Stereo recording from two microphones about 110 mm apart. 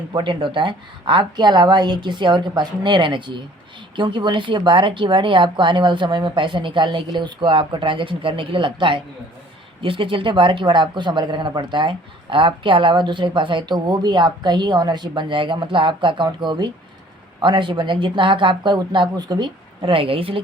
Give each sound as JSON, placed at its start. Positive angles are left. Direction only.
{"t": 0.1, "sound": "speech", "side_deg": -45}